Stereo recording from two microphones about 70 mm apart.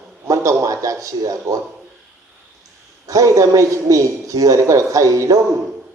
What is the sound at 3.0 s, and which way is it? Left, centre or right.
A man's voice, right.